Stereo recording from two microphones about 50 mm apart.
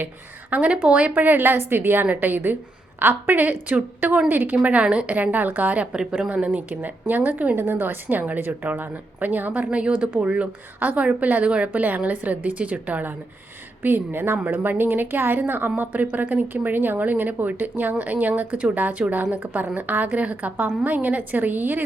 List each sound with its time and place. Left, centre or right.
0.5 s a woman's voice: right
6.0 s speech: centre
6.2 s a woman's voice: right
9.6 s speech: right
13.8 s a woman's voice: right